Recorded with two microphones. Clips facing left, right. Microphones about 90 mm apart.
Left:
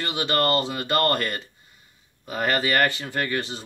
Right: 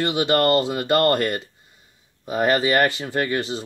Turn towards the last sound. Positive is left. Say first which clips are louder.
# right 4 dB
turn(degrees=-20)  # may be behind; listen again after turning